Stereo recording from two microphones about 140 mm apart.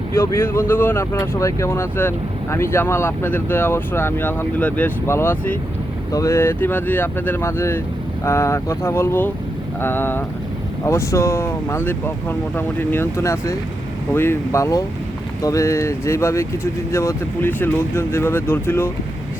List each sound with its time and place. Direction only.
0.1 s speech: 20° left (ahead or behind)